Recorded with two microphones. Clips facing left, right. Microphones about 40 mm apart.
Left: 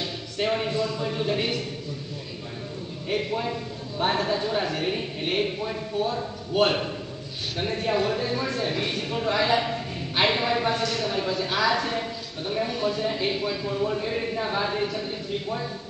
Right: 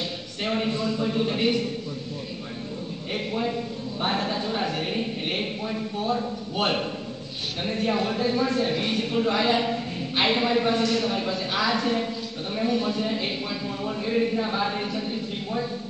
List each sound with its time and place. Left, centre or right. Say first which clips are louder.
0.5 s a sound: right 1 dB; centre
1.0 s speech: right 2 dB; centre
3.1 s speech: left 1 dB; centre
7.8 s speech: right 1 dB; centre
10.8 s speech: right 2 dB; right
12.0 s a sound: right 2 dB; centre
13.0 s speech: left 2 dB; centre